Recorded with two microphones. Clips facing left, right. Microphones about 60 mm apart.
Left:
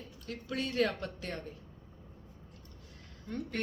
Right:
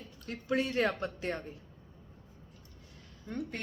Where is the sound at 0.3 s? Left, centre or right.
Right.